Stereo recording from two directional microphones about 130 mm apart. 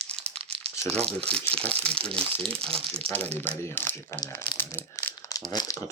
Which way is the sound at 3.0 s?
10° left (ahead or behind).